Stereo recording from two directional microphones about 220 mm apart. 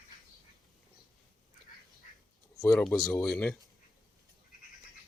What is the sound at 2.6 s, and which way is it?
Speech, 5° left (ahead or behind).